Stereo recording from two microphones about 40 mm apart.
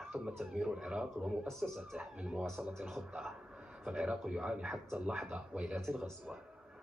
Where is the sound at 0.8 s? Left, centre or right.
Right.